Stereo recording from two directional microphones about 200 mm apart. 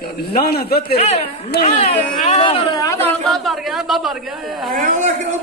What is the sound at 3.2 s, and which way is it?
Speech, centre (ahead or behind).